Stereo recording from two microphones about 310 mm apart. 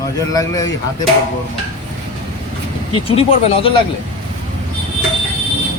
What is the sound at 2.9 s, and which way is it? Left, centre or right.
Speech, centre.